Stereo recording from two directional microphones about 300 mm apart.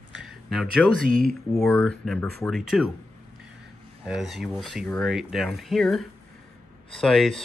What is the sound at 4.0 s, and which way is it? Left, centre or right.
Speech, centre.